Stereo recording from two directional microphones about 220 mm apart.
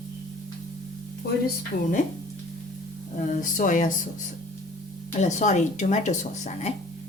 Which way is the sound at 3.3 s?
35° left (ahead or behind).